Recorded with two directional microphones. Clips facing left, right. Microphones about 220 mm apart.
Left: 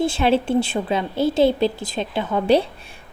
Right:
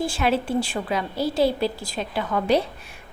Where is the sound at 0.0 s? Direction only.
25° left (ahead or behind).